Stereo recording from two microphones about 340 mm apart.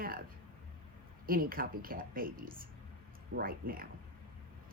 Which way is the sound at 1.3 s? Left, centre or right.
Right.